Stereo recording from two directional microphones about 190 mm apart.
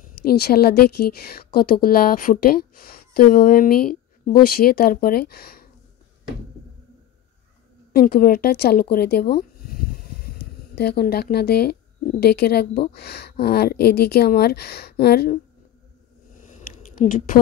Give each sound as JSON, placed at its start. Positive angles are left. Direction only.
{"t": 0.2, "sound": "a woman's voice", "side_deg": 55}
{"t": 7.9, "sound": "speech", "side_deg": 50}
{"t": 16.3, "sound": "a sound", "side_deg": 40}